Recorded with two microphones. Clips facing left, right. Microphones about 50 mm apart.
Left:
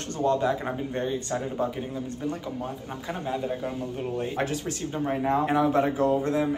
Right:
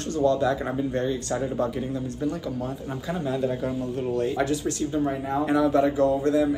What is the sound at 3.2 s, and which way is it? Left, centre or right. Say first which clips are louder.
Speech: right 4 dB; centre.